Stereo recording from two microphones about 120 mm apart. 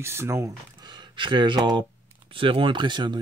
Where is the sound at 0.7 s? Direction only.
40° right (ahead or behind).